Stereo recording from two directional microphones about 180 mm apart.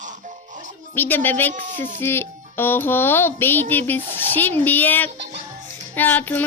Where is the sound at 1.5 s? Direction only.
45° right (ahead or behind).